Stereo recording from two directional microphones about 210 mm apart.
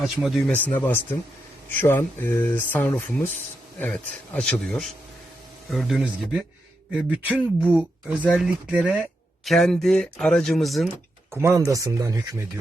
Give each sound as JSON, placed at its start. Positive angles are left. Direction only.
{"t": 0.0, "sound": "speech", "side_deg": 0}
{"t": 8.2, "sound": "speech", "side_deg": 5}
{"t": 11.3, "sound": "speech", "side_deg": -10}